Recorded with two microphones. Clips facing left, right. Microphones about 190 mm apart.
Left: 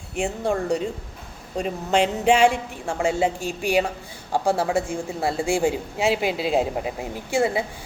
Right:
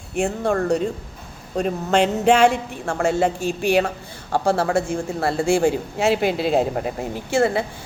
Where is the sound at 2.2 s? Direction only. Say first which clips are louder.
Right 2 dB; 10° left (ahead or behind).